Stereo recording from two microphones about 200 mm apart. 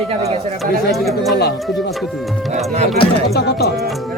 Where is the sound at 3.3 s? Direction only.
55° left (ahead or behind).